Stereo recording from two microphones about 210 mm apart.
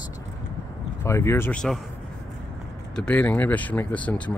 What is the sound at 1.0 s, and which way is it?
Speech, 15° left (ahead or behind).